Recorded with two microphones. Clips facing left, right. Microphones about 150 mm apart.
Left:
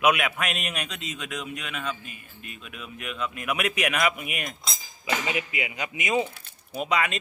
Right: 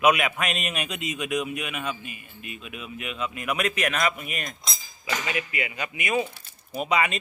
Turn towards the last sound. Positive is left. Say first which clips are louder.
# right 1 dB
turn(degrees=-5)  # may be behind; listen again after turning